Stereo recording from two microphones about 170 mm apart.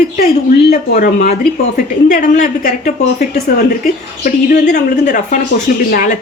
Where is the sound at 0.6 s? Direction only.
45° left (ahead or behind).